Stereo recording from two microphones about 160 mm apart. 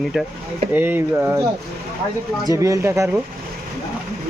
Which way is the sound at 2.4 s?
20° right (ahead or behind).